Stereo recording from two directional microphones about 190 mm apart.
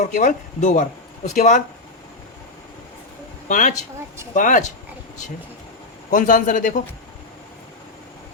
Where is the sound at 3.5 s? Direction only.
45° left (ahead or behind).